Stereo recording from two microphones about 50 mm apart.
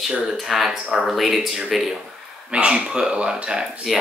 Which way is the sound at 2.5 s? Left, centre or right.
Right.